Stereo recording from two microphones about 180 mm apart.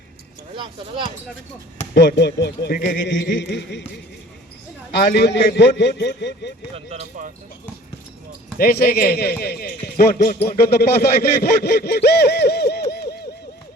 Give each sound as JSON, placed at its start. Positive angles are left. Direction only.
{"t": 0.5, "sound": "speech", "side_deg": -25}
{"t": 2.0, "sound": "a man's voice", "side_deg": 70}
{"t": 2.7, "sound": "a sound", "side_deg": 50}
{"t": 3.1, "sound": "a man's voice", "side_deg": 90}
{"t": 4.9, "sound": "a man's voice", "side_deg": 70}
{"t": 6.7, "sound": "speech", "side_deg": -40}
{"t": 8.5, "sound": "speech", "side_deg": 60}
{"t": 12.9, "sound": "a sound", "side_deg": 65}